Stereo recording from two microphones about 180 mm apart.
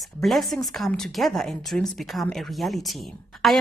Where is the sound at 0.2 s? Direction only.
Centre (ahead or behind).